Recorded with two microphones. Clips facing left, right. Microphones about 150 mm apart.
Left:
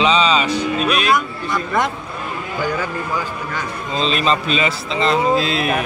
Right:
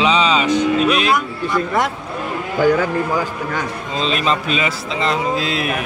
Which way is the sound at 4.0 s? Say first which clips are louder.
Left 1 dB; 10° right (ahead or behind).